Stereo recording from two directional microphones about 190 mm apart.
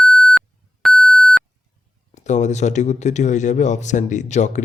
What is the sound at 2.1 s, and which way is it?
Speech, 40° left (ahead or behind).